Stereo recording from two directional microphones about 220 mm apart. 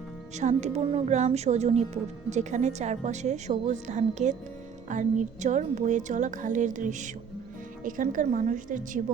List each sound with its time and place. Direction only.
0.3 s a woman's voice: 30° right (ahead or behind)